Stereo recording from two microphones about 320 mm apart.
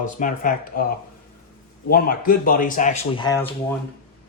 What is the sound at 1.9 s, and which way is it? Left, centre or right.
Speech, left.